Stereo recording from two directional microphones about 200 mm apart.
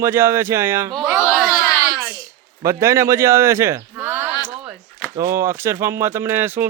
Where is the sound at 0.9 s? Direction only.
Centre (ahead or behind).